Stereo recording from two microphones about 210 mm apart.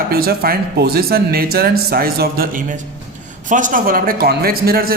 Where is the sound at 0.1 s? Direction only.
45° right (ahead or behind).